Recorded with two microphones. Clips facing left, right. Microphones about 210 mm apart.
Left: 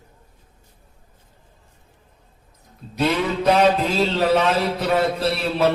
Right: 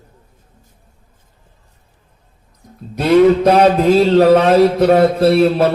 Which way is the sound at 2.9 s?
45° right (ahead or behind).